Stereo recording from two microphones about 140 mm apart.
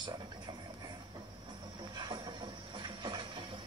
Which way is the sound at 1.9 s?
30° right (ahead or behind).